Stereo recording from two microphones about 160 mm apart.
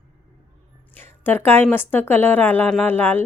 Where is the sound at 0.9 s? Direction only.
10° left (ahead or behind).